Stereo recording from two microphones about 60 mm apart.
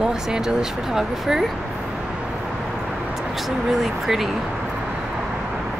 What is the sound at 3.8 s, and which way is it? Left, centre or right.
Speech, centre.